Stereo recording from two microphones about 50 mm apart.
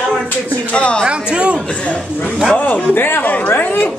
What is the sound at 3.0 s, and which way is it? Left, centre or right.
Speech, left.